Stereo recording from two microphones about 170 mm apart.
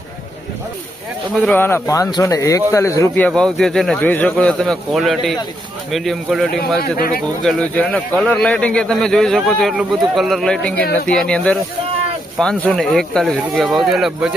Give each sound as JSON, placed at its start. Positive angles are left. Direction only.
{"t": 1.4, "sound": "speech", "side_deg": 10}
{"t": 3.2, "sound": "speech", "side_deg": 5}
{"t": 6.9, "sound": "speech", "side_deg": 60}
{"t": 7.4, "sound": "speech", "side_deg": 5}